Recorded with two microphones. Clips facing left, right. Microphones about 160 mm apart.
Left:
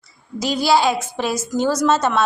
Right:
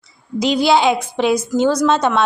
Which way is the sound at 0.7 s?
5° left (ahead or behind).